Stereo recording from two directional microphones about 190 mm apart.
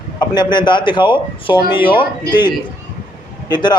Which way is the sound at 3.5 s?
25° left (ahead or behind).